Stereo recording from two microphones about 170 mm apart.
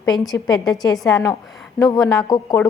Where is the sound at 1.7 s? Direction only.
20° left (ahead or behind).